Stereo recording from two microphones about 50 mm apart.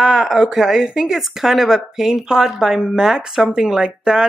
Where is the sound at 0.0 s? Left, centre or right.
Centre.